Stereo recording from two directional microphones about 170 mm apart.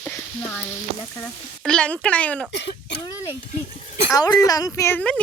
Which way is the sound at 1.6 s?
5° left (ahead or behind).